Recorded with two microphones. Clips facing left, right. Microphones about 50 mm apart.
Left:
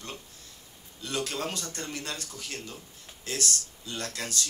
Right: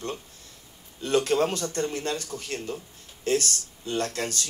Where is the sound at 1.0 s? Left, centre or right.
Right.